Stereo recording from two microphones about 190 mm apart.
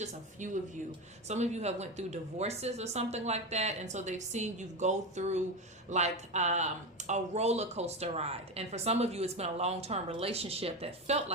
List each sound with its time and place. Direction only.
0.0 s speech: 40° right (ahead or behind)